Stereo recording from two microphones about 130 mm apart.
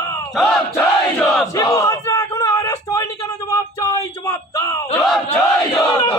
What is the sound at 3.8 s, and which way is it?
Bellow, 25° left (ahead or behind).